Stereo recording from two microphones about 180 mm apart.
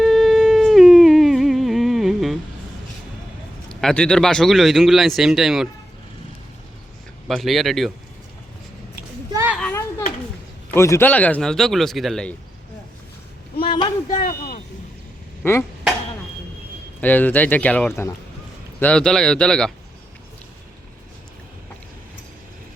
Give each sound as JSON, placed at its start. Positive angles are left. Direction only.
{"t": 0.0, "sound": "music", "side_deg": 0}
{"t": 3.7, "sound": "speech", "side_deg": 5}
{"t": 7.3, "sound": "speech", "side_deg": 0}
{"t": 9.3, "sound": "a sound", "side_deg": -15}
{"t": 9.6, "sound": "children playing", "side_deg": 10}
{"t": 10.8, "sound": "speech", "side_deg": 15}
{"t": 13.7, "sound": "a sound", "side_deg": 25}
{"t": 14.3, "sound": "vehicle", "side_deg": 50}
{"t": 15.4, "sound": "speech", "side_deg": 15}
{"t": 17.0, "sound": "speech", "side_deg": 10}